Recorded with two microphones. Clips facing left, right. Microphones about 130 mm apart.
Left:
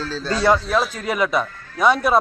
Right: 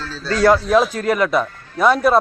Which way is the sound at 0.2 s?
25° left (ahead or behind).